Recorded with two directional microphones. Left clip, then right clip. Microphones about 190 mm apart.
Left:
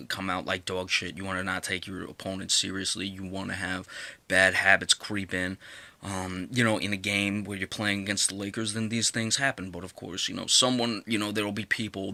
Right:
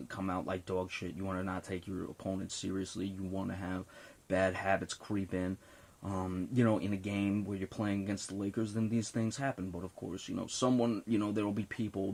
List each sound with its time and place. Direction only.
0.2 s speech: 10° left (ahead or behind)
4.3 s speech: 5° left (ahead or behind)
10.2 s speech: centre (ahead or behind)